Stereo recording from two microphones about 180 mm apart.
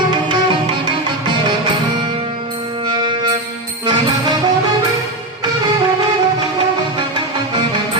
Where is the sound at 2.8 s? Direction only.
25° right (ahead or behind).